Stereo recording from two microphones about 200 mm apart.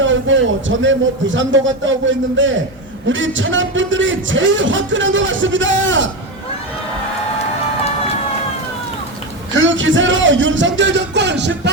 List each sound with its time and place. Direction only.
0.0 s a man's voice: 70° right (ahead or behind)
9.6 s a man's voice: 70° right (ahead or behind)